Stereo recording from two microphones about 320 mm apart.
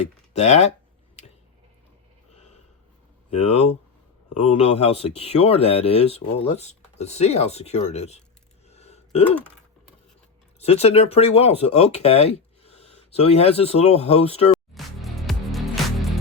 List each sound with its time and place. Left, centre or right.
0.3 s speech: left
3.2 s speech: centre
8.7 s a sound: centre
10.6 s speech: centre
14.5 s music: centre